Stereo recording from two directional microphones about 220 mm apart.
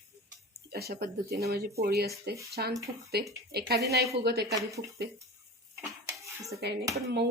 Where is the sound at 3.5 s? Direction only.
45° right (ahead or behind).